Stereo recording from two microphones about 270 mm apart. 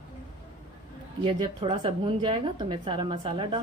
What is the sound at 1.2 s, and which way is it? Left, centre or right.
A woman's voice, centre.